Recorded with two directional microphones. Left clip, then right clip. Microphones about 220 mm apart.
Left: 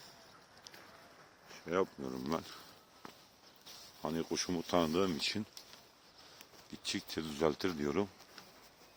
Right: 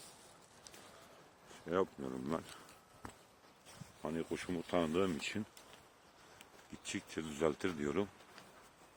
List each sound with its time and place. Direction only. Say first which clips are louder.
1.6 s speech: left 2 dB; 5° left (ahead or behind)
2.0 s speech: left 2 dB; 15° left (ahead or behind)
4.0 s speech: left 4 dB; 25° left (ahead or behind)
6.4 s speech: left 7 dB; 15° left (ahead or behind)